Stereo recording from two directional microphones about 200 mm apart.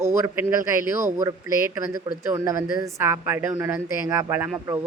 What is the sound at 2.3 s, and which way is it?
Speech, 15° right (ahead or behind).